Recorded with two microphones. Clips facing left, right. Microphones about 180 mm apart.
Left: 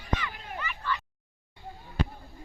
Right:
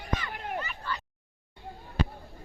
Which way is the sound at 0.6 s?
35° right (ahead or behind).